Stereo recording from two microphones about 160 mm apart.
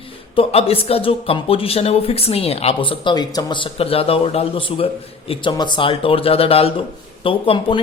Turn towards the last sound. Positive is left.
turn(degrees=35)  # may be behind; listen again after turning